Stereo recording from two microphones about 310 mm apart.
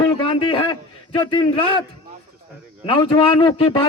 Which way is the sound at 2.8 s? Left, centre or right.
Centre.